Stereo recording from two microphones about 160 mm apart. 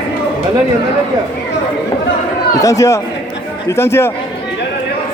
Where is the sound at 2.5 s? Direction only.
20° left (ahead or behind).